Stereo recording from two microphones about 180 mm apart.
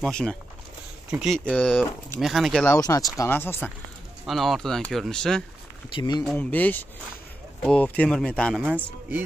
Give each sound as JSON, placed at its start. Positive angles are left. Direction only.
{"t": 0.0, "sound": "speech", "side_deg": 5}
{"t": 2.8, "sound": "speech", "side_deg": 20}
{"t": 4.3, "sound": "speech", "side_deg": 0}
{"t": 5.9, "sound": "speech", "side_deg": 25}
{"t": 6.2, "sound": "speech", "side_deg": 10}